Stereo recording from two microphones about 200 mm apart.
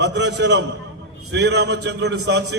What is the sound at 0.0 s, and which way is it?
A man's voice, 60° right (ahead or behind).